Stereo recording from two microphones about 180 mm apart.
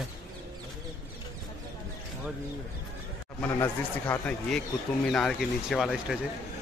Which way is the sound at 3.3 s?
10° left (ahead or behind).